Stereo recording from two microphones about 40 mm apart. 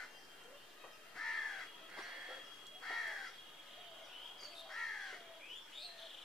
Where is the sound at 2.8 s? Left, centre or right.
Centre.